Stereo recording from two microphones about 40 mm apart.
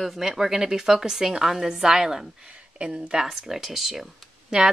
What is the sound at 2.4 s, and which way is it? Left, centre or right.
Speech, right.